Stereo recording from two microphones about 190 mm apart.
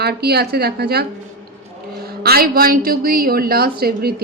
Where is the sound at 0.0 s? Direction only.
55° right (ahead or behind).